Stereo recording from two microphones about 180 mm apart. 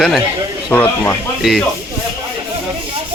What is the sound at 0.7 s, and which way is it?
Speech, 10° left (ahead or behind).